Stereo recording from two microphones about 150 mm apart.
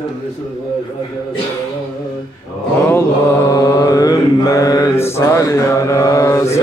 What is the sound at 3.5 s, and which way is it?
Mantra, 25° left (ahead or behind).